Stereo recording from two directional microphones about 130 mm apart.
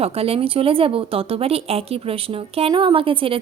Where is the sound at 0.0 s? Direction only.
50° right (ahead or behind).